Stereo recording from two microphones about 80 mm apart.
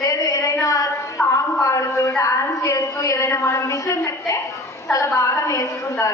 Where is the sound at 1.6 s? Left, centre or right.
Left.